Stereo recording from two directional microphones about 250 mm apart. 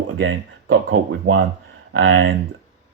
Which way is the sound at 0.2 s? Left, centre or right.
Right.